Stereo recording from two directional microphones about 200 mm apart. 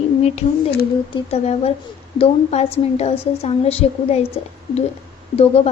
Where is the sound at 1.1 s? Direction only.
30° left (ahead or behind).